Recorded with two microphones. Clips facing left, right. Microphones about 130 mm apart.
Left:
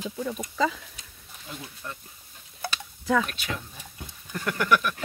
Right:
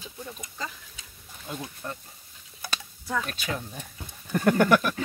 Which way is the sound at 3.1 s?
90° left.